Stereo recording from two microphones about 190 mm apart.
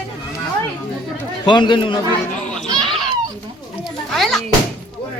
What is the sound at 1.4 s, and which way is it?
Speech, 25° left (ahead or behind).